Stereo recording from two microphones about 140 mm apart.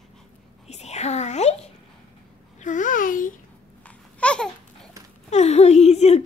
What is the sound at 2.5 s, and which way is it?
Babbling, 65° left (ahead or behind).